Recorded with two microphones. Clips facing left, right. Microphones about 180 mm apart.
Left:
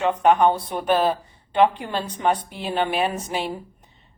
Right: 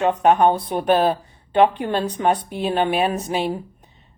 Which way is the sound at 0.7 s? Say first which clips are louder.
Right 3 dB; 55° right (ahead or behind).